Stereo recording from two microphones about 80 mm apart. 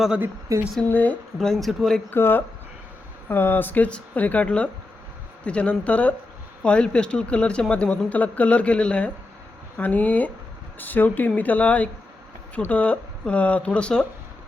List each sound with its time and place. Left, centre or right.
0.9 s speech: left
1.4 s speech: centre
2.0 s speech: left